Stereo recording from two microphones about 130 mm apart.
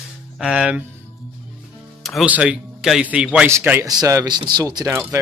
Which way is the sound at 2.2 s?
10° right (ahead or behind).